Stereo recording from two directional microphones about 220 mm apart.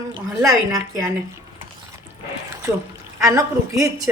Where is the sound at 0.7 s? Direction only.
15° right (ahead or behind).